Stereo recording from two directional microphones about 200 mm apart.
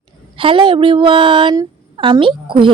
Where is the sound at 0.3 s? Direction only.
25° right (ahead or behind).